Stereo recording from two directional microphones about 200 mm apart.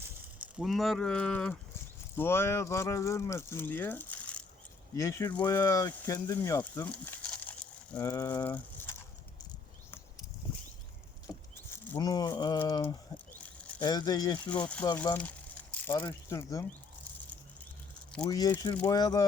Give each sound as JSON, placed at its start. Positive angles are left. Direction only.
{"t": 0.6, "sound": "speech", "side_deg": 0}
{"t": 6.8, "sound": "a sound", "side_deg": 10}
{"t": 7.9, "sound": "speech", "side_deg": 15}
{"t": 8.4, "sound": "a sound", "side_deg": 10}
{"t": 11.7, "sound": "speech", "side_deg": 15}
{"t": 14.5, "sound": "speech", "side_deg": 5}
{"t": 18.3, "sound": "speech", "side_deg": 20}